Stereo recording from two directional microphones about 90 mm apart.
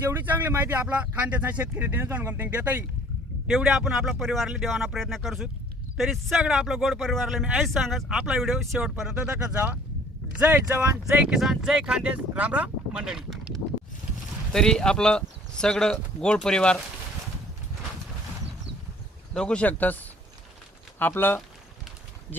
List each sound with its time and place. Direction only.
0.1 s speech: 20° right (ahead or behind)
3.4 s speech: 5° right (ahead or behind)
10.3 s speech: 20° right (ahead or behind)
11.3 s speech: 5° right (ahead or behind)
19.3 s speech: 10° left (ahead or behind)